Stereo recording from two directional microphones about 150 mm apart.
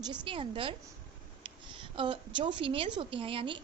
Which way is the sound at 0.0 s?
30° right (ahead or behind).